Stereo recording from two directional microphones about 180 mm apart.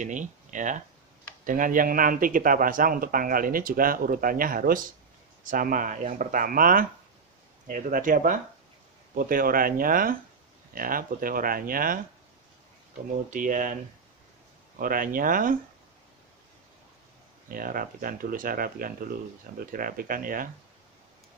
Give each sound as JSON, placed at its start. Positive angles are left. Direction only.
{"t": 0.0, "sound": "speech", "side_deg": -45}
{"t": 13.3, "sound": "speech", "side_deg": -45}
{"t": 14.8, "sound": "speech", "side_deg": -50}
{"t": 17.5, "sound": "speech", "side_deg": -50}